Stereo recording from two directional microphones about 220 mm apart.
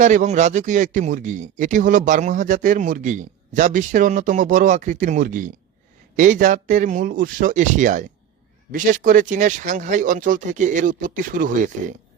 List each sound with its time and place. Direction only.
0.0 s speech: 35° right (ahead or behind)